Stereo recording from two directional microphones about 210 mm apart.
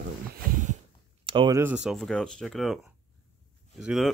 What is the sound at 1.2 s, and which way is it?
Speech, 25° right (ahead or behind).